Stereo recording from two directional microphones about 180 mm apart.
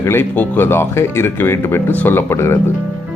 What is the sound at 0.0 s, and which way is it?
A man's voice, 15° left (ahead or behind).